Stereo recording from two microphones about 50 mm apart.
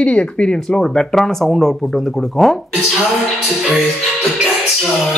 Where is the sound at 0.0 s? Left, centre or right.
Left.